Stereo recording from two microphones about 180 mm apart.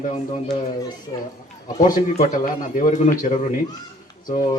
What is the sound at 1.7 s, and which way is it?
A man's voice, 45° left (ahead or behind).